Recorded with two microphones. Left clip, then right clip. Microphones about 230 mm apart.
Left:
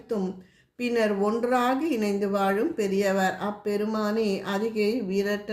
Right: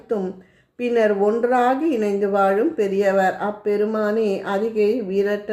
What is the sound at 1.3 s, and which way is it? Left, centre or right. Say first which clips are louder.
Speech: right 6 dB; left.